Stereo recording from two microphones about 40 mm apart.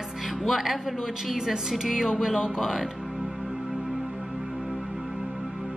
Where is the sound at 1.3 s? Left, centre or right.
Centre.